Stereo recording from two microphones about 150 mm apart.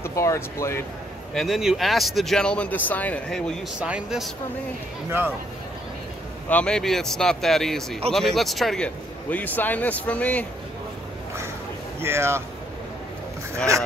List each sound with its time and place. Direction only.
0.0 s speech: 20° left (ahead or behind)
1.3 s speech: centre (ahead or behind)
3.8 s speech: 5° right (ahead or behind)
6.5 s a man's voice: 5° left (ahead or behind)
12.0 s speech: 15° right (ahead or behind)